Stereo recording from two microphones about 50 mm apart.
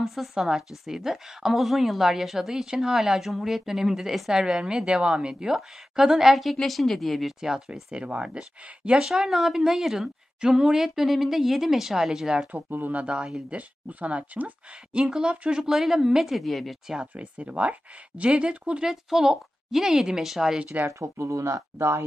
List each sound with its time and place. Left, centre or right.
0.0 s a woman's voice: centre
7.3 s a woman's voice: centre
8.0 s speech: right
9.0 s a woman's voice: centre
12.5 s speech: right
13.0 s speech: centre
13.5 s a woman's voice: right; by 16.7 s centre
16.8 s a woman's voice: centre
17.1 s speech: right
18.9 s a woman's voice: centre
21.0 s speech: right